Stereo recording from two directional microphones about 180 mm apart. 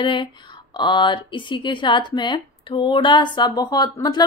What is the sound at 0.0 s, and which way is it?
Speech, 25° left (ahead or behind).